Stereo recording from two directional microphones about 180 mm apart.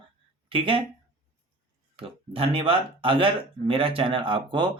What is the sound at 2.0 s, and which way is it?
Speech, 30° right (ahead or behind).